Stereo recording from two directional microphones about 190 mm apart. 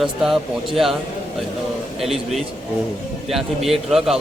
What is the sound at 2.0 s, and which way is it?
A man's voice, centre (ahead or behind).